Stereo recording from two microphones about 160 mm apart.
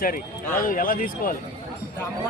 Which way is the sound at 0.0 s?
60° left (ahead or behind).